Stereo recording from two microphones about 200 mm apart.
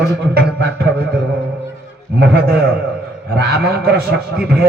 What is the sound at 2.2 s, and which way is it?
A man's voice, 55° right (ahead or behind).